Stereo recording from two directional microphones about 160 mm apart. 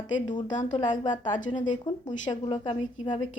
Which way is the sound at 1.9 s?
25° left (ahead or behind).